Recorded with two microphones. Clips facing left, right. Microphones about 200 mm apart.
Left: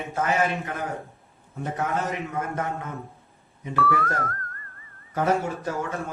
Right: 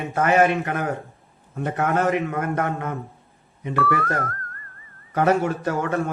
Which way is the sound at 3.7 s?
Centre (ahead or behind).